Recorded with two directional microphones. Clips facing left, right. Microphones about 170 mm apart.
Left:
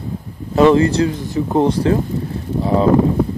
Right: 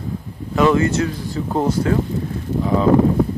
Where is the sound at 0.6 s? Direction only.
30° left (ahead or behind).